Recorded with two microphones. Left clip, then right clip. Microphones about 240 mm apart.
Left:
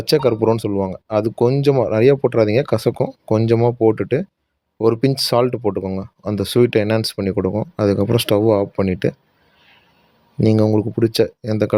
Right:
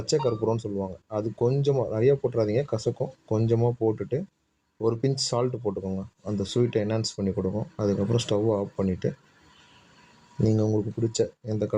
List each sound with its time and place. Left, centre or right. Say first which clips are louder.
0.0 s speech: left 10 dB; left
10.4 s speech: left 9 dB; left